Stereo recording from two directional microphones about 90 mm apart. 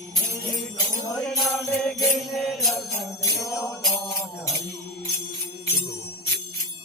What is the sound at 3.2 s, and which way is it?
Jingle bell, 40° left (ahead or behind).